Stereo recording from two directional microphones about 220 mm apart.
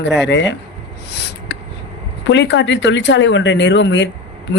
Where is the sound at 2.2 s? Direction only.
55° left (ahead or behind).